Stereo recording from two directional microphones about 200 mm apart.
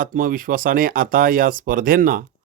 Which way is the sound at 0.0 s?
45° right (ahead or behind).